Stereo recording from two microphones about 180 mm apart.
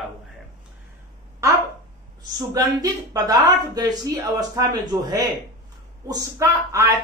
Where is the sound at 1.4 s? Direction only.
15° right (ahead or behind).